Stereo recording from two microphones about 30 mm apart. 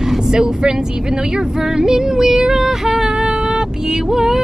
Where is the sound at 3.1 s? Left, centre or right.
Right.